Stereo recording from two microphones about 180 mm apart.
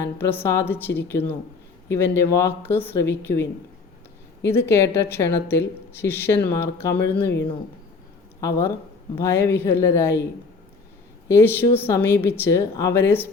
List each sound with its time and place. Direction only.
0.0 s speech: 10° left (ahead or behind)
4.4 s speech: 15° left (ahead or behind)
8.4 s speech: 15° left (ahead or behind)
11.3 s speech: 15° left (ahead or behind)